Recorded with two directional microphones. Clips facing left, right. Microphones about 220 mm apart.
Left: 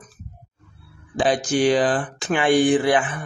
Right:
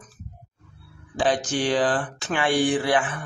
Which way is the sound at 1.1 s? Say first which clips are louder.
Left 4 dB; 10° left (ahead or behind).